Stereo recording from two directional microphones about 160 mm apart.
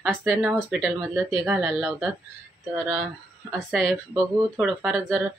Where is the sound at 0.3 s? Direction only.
10° right (ahead or behind).